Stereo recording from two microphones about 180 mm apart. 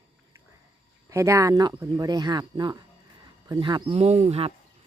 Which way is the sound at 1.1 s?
15° right (ahead or behind).